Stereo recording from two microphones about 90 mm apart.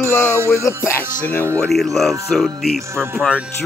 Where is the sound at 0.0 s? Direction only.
30° left (ahead or behind).